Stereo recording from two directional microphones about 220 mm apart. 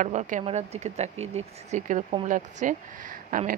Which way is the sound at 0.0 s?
35° right (ahead or behind).